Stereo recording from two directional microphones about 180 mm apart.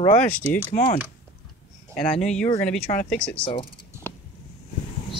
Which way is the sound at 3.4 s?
30° left (ahead or behind).